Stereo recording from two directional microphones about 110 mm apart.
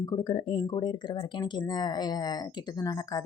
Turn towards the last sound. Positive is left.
turn(degrees=35)  # may be behind; listen again after turning